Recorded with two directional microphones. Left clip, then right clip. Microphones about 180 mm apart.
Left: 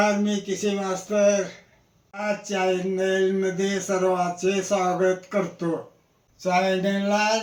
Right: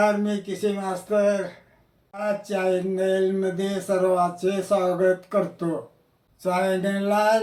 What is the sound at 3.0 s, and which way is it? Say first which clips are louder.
Mantra: even; 30° right (ahead or behind).